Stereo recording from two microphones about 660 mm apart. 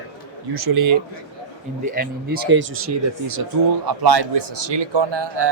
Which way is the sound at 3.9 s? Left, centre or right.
Right.